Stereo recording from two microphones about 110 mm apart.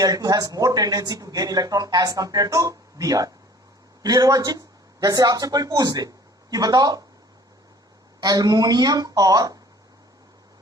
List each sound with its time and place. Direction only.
0.0 s speech: 35° right (ahead or behind)
8.2 s speech: 35° right (ahead or behind)